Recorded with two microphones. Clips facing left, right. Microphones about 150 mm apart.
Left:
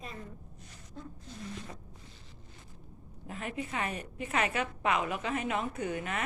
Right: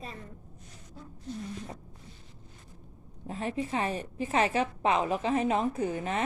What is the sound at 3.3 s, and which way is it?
A woman's voice, 30° right (ahead or behind).